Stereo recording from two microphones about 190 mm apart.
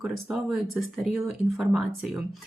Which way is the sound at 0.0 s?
Centre (ahead or behind).